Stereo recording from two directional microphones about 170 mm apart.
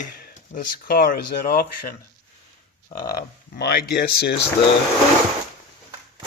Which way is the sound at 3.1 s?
70° left (ahead or behind).